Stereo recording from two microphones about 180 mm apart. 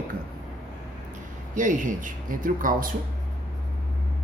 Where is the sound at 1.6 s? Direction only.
45° right (ahead or behind).